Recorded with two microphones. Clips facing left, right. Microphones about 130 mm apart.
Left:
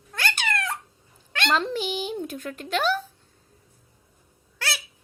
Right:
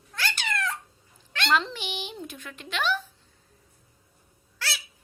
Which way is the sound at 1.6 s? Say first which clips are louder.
Left 8 dB; 40° left (ahead or behind).